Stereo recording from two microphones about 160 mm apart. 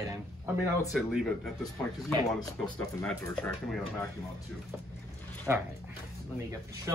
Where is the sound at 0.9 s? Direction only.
Centre (ahead or behind).